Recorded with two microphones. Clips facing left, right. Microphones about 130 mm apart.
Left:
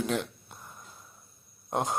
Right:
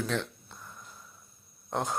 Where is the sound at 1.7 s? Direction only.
20° left (ahead or behind).